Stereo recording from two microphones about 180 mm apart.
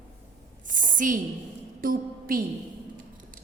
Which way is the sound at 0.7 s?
45° right (ahead or behind).